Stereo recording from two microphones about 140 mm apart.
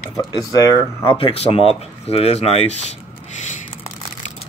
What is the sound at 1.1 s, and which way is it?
Speech, 40° left (ahead or behind).